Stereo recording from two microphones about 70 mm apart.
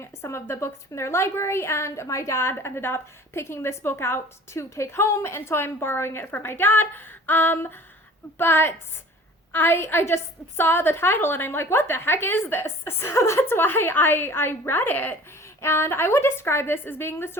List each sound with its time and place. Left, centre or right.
0.0 s a woman's voice: left